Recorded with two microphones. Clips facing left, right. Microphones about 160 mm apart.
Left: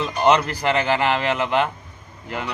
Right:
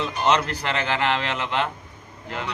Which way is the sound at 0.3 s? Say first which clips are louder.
Left 5 dB; 10° left (ahead or behind).